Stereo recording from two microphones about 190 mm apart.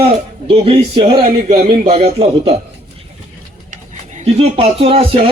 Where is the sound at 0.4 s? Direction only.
30° right (ahead or behind).